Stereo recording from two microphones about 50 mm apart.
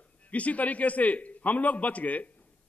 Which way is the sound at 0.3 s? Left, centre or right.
Left.